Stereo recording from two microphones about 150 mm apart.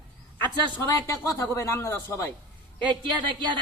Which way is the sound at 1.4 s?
15° left (ahead or behind).